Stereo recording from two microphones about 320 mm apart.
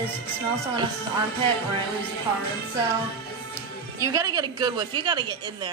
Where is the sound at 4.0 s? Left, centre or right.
Centre.